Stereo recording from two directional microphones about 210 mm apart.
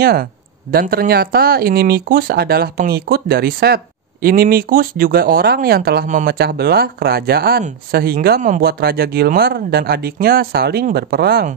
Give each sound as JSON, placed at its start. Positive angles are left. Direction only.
{"t": 0.0, "sound": "speech", "side_deg": -45}